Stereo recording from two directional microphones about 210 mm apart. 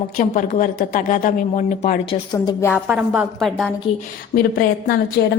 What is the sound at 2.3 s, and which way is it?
Speech, 20° left (ahead or behind).